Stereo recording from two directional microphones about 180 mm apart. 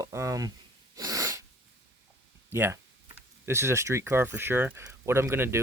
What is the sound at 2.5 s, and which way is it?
Speech, 15° right (ahead or behind).